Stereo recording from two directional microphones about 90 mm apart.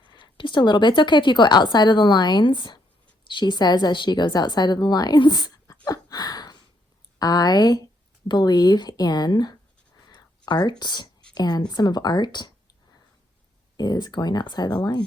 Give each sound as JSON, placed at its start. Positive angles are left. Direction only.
{"t": 0.0, "sound": "a woman's voice", "side_deg": 55}
{"t": 5.8, "sound": "a sound", "side_deg": 45}
{"t": 7.2, "sound": "a woman's voice", "side_deg": 50}
{"t": 10.1, "sound": "a sound", "side_deg": 50}
{"t": 11.3, "sound": "a woman's voice", "side_deg": 50}
{"t": 13.7, "sound": "a woman's voice", "side_deg": 45}